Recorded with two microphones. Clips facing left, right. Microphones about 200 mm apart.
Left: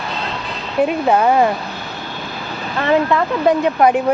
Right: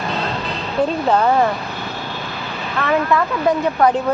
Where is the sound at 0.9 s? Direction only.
10° left (ahead or behind).